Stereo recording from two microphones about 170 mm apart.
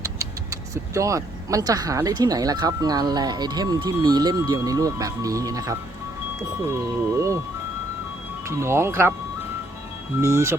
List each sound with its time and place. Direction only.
0.0 s speech: 20° right (ahead or behind)
8.4 s speech: 15° right (ahead or behind)
10.2 s speech: 15° right (ahead or behind)